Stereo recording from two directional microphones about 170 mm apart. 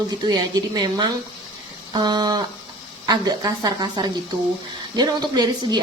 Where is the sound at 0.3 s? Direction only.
20° right (ahead or behind).